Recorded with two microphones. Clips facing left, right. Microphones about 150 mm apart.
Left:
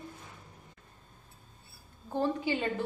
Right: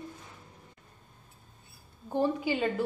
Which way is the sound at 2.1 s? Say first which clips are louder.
Right 2 dB; 15° right (ahead or behind).